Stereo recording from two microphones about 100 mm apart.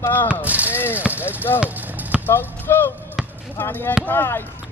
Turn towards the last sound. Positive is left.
turn(degrees=20)  # may be behind; listen again after turning